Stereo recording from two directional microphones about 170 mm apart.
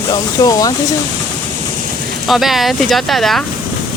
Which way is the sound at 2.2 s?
Centre (ahead or behind).